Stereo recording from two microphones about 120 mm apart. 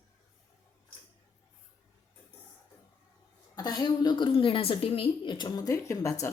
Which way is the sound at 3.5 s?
35° left (ahead or behind).